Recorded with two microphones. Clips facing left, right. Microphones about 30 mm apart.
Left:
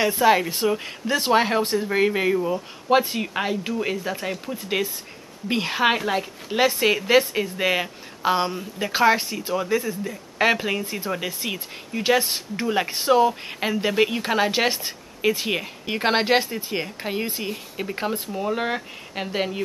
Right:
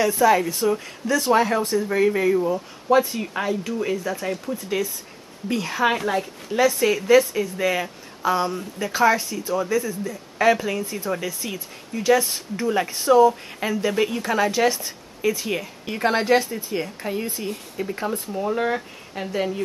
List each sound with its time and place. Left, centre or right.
0.0 s speech: left
4.6 s speech: left
5.9 s speech: centre
6.5 s speech: left
18.3 s speech: centre